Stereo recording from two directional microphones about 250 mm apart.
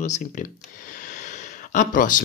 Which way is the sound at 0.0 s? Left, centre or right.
Left.